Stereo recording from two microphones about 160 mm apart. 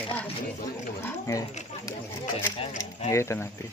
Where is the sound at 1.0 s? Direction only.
20° left (ahead or behind).